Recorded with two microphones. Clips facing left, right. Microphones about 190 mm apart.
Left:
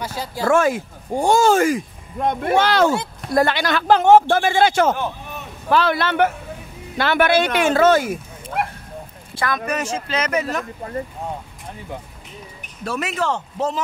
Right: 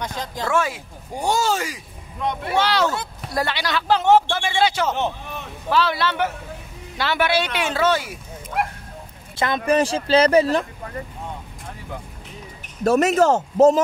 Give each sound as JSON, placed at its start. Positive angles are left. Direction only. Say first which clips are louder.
{"t": 0.0, "sound": "speech", "louder": "left 2 dB", "side_deg": 10}
{"t": 0.5, "sound": "speech", "louder": "left 7 dB", "side_deg": 50}
{"t": 8.6, "sound": "a sound", "louder": "even", "side_deg": 0}
{"t": 9.4, "sound": "speech", "louder": "right 4 dB", "side_deg": -25}
{"t": 12.8, "sound": "a man's voice", "louder": "right 8 dB", "side_deg": -45}